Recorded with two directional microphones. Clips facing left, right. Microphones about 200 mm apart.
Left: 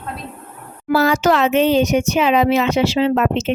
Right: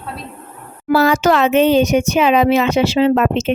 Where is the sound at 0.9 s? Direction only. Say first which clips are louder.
Right 2 dB; 60° right (ahead or behind).